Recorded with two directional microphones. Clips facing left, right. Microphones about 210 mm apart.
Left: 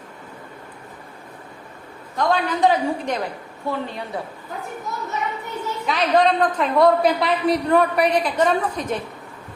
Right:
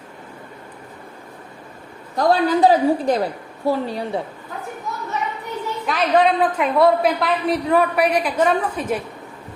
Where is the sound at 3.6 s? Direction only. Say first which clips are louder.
Right 6 dB; 35° right (ahead or behind).